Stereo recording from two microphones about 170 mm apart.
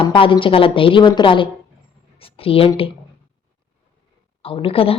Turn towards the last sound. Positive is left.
turn(degrees=35)  # may be behind; listen again after turning